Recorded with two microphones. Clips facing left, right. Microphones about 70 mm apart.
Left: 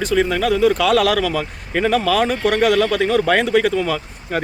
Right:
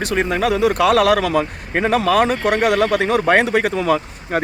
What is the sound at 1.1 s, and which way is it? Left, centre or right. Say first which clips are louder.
Speech: right 2 dB; right.